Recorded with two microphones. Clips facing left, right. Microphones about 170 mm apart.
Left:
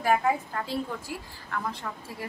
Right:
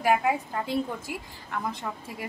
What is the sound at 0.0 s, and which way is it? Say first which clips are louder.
A woman's voice: right 1 dB; 15° right (ahead or behind).